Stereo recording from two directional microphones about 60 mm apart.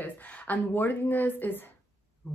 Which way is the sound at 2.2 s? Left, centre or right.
Centre.